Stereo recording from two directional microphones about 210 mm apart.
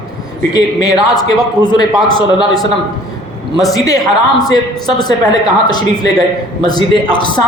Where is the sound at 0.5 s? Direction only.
20° left (ahead or behind).